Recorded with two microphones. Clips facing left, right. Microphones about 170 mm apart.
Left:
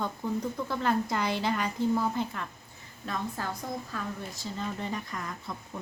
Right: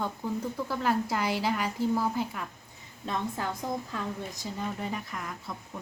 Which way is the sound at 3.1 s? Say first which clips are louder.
Right 2 dB; 20° right (ahead or behind).